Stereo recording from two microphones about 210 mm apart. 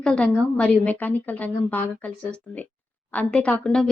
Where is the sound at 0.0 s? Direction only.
5° left (ahead or behind).